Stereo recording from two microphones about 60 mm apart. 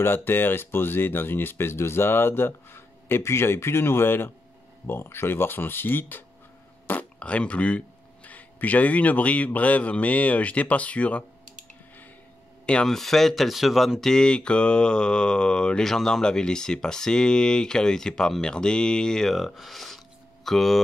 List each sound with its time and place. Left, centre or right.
0.0 s speech: left
12.8 s speech: centre